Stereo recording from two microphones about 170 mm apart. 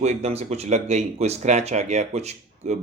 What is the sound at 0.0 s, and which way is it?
Speech, 40° right (ahead or behind).